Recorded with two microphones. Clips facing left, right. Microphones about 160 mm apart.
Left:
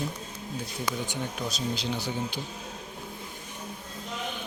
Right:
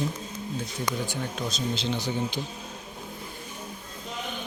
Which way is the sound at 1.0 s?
15° left (ahead or behind).